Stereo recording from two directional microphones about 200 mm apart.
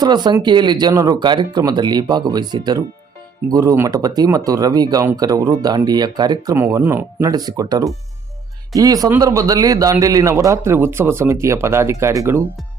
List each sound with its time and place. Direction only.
0.0 s a man's voice: 20° right (ahead or behind)